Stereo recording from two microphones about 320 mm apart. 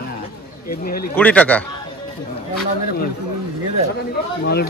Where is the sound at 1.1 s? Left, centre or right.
Centre.